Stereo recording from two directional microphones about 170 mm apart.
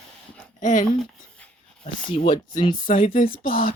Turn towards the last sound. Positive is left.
turn(degrees=55)  # may be behind; listen again after turning